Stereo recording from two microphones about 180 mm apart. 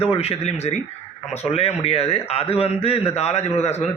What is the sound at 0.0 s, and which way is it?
A man's voice, 35° left (ahead or behind).